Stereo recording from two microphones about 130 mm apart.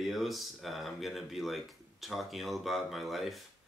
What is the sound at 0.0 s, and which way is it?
Speech, centre (ahead or behind).